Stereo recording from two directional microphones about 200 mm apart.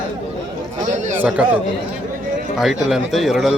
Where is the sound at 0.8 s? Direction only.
40° right (ahead or behind).